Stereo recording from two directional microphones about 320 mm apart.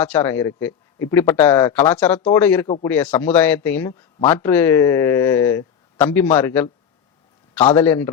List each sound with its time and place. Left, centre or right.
0.0 s speech: centre
2.9 s speech: centre
7.8 s speech: centre